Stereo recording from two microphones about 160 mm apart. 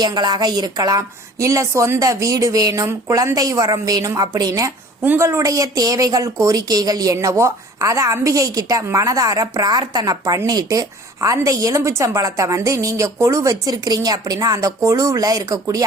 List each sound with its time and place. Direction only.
0.0 s a woman's voice: 25° right (ahead or behind)